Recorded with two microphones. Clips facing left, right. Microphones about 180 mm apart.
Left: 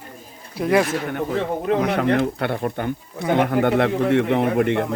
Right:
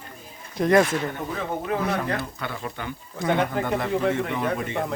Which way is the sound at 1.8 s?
75° left (ahead or behind).